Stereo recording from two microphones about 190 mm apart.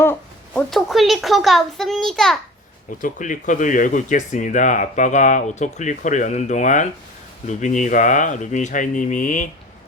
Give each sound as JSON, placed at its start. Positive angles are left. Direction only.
{"t": 0.0, "sound": "a sound", "side_deg": 10}
{"t": 0.7, "sound": "a child's voice", "side_deg": 0}
{"t": 3.0, "sound": "speech", "side_deg": 40}